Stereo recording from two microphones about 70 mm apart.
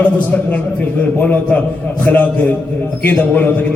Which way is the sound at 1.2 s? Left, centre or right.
Left.